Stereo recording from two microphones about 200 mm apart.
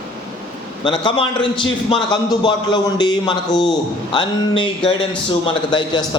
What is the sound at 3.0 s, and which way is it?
A man's voice, 20° left (ahead or behind).